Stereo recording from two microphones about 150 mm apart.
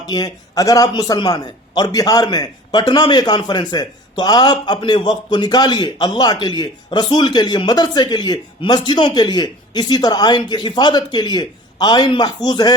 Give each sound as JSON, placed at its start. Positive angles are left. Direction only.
{"t": 0.0, "sound": "a man's voice", "side_deg": 25}